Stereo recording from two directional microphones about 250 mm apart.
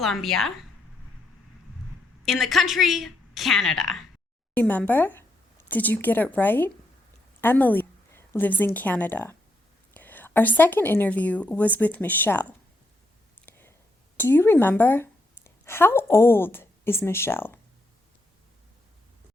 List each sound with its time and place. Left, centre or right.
0.0 s a woman's voice: centre
2.2 s a woman's voice: centre
13.4 s a sound: centre
14.2 s speech: centre